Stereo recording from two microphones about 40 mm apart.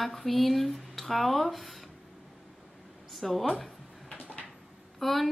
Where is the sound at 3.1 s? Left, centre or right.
Centre.